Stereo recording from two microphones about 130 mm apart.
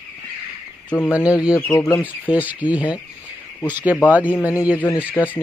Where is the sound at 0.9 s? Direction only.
15° left (ahead or behind).